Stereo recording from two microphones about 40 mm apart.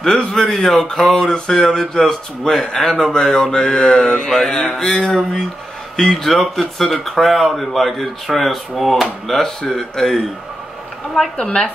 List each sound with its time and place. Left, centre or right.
0.0 s speech: centre
1.0 s speech: centre
4.1 s mantra: centre
5.9 s speech: centre
11.4 s speech: centre